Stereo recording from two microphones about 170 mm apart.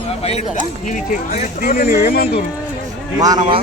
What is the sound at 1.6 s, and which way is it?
Speech, 60° left (ahead or behind).